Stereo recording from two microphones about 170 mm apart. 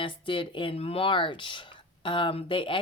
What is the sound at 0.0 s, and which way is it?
Speech, 30° left (ahead or behind).